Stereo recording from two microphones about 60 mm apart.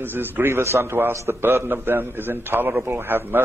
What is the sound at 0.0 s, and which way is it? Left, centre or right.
A man's voice, right.